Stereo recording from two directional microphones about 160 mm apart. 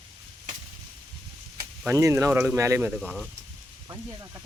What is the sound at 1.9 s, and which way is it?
Speech, 15° right (ahead or behind).